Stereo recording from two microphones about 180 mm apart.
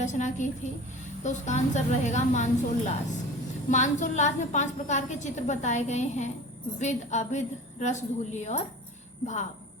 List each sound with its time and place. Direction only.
0.0 s a woman's voice: 40° left (ahead or behind)